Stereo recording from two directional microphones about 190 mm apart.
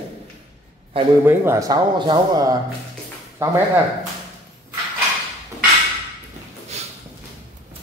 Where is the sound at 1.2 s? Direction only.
15° right (ahead or behind).